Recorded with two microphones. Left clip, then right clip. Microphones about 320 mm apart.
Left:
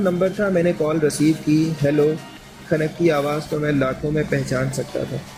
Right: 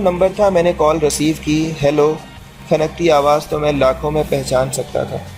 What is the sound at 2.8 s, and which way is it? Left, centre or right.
Speech, right.